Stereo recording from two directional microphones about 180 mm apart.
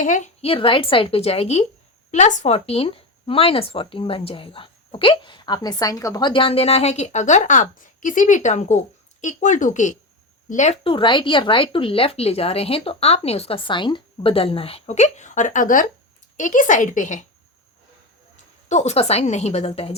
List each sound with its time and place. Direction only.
0.0 s a woman's voice: 45° left (ahead or behind)
0.5 s a woman's voice: 30° left (ahead or behind)
18.7 s speech: 40° left (ahead or behind)